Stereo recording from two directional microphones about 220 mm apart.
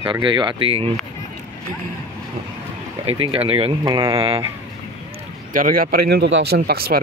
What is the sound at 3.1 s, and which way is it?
Speech, 25° right (ahead or behind).